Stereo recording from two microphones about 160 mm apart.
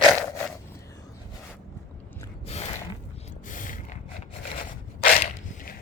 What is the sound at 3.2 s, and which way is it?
Gasp, 55° left (ahead or behind).